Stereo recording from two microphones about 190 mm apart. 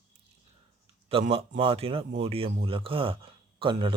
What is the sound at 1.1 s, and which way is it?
Speech, 30° right (ahead or behind).